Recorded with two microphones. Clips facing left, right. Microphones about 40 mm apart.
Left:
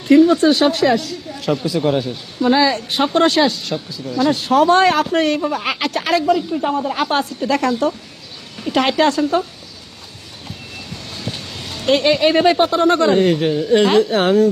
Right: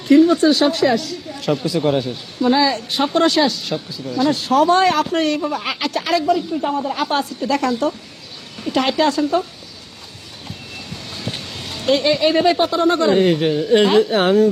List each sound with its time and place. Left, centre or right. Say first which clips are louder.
0.1 s speech: left 1 dB; left
1.4 s speech: even; centre
2.4 s speech: left 1 dB; left
3.7 s speech: even; centre
4.3 s speech: left 1 dB; left
7.7 s speech: left 1 dB; left
8.7 s speech: left 2 dB; left
11.4 s a sound: even; centre
11.9 s speech: left 2 dB; left
13.1 s speech: even; centre